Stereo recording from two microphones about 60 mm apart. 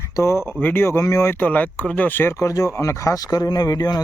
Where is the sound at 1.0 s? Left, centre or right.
Left.